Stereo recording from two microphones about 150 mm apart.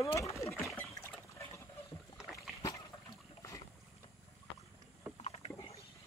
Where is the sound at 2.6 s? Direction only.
25° left (ahead or behind).